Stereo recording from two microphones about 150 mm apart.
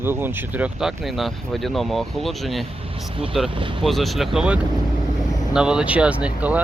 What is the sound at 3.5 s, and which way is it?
Speech, 35° right (ahead or behind).